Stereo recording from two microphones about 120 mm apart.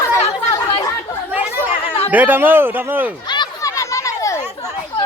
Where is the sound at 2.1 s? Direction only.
15° right (ahead or behind).